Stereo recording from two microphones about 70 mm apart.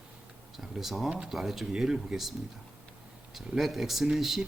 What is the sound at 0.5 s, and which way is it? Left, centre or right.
Speech, centre.